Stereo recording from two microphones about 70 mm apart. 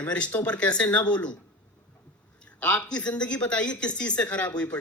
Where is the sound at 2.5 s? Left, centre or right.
Centre.